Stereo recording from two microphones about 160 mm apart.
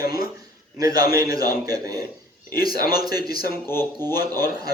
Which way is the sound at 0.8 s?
25° right (ahead or behind).